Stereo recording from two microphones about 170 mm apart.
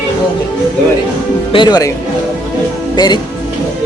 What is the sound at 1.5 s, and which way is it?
Speech, 25° left (ahead or behind).